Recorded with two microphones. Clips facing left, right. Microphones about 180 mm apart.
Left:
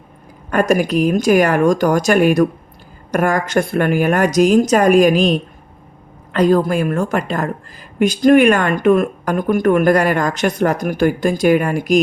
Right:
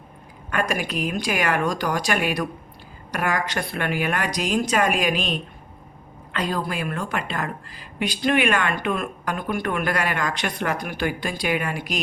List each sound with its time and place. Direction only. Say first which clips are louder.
0.5 s a woman's voice: left 11 dB; 40° left (ahead or behind)